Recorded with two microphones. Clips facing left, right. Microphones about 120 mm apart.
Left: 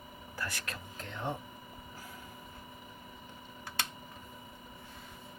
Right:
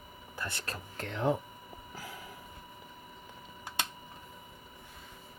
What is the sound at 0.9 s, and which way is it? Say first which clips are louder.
Speech: right 8 dB; 85° right.